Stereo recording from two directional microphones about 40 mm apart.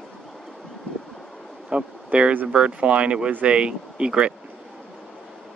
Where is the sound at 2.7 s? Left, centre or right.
Right.